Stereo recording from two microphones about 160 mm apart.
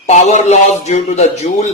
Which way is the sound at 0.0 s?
45° left (ahead or behind).